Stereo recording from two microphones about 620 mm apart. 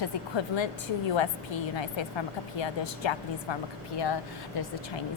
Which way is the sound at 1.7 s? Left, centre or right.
Left.